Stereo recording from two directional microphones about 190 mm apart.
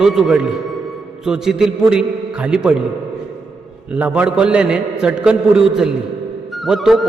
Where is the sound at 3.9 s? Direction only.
5° right (ahead or behind).